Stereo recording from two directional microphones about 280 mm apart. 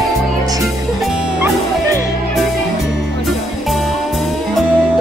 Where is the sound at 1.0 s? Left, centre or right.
Centre.